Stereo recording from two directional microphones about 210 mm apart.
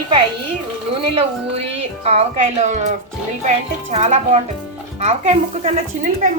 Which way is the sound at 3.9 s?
35° right (ahead or behind).